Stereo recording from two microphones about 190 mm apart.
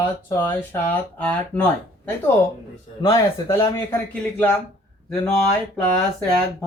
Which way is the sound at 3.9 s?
5° left (ahead or behind).